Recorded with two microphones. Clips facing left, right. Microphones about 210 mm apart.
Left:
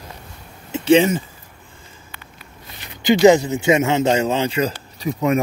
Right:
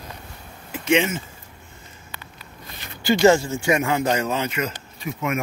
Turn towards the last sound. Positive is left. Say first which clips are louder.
# left 7 dB
turn(degrees=35)  # may be behind; listen again after turning